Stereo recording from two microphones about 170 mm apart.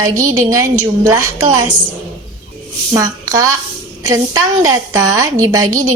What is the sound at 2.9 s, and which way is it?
A woman's voice, 20° right (ahead or behind).